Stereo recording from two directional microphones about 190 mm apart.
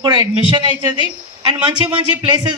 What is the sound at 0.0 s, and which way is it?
Speech, 25° right (ahead or behind).